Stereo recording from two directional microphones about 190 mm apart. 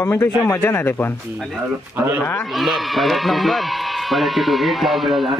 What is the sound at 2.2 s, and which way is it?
Speech, 15° left (ahead or behind).